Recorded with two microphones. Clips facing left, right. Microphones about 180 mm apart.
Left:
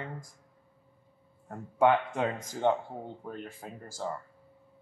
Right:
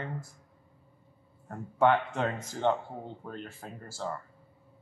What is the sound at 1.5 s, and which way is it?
Speech, 10° left (ahead or behind).